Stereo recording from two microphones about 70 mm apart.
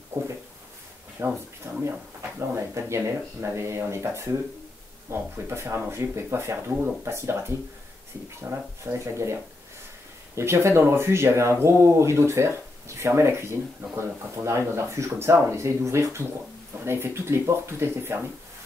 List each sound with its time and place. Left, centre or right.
0.1 s speech: right
8.9 s speech: right